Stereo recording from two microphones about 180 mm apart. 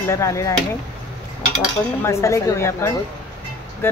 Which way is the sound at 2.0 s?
15° left (ahead or behind).